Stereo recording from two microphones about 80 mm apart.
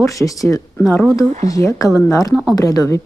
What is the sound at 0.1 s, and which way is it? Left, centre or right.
Speech, left.